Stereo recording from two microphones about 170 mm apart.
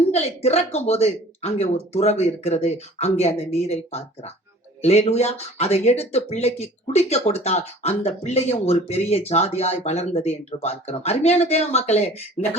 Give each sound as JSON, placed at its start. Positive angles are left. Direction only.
{"t": 0.1, "sound": "speech", "side_deg": 40}